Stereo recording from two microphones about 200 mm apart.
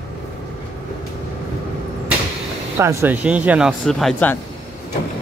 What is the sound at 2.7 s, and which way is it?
Speech, 10° right (ahead or behind).